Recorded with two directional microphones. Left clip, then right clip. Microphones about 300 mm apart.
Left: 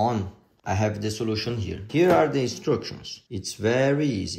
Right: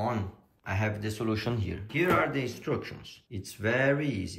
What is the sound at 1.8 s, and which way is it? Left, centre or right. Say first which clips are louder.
Speech: left 7 dB; centre.